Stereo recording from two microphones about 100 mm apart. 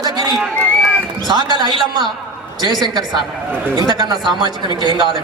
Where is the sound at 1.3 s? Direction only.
45° right (ahead or behind).